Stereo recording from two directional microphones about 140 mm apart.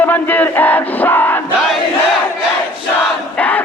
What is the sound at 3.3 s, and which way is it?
Crowd, 10° left (ahead or behind).